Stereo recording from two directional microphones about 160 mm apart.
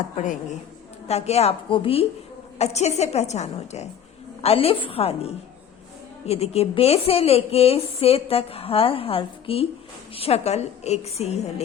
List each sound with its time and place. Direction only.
1.0 s a woman's voice: 40° left (ahead or behind)